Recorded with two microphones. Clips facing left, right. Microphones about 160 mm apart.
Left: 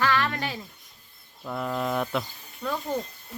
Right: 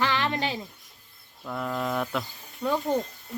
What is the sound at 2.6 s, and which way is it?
Speech, 20° right (ahead or behind).